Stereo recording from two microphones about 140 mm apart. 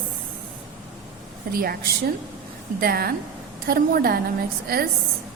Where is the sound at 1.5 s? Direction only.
90° right.